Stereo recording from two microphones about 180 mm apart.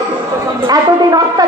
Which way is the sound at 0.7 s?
20° right (ahead or behind).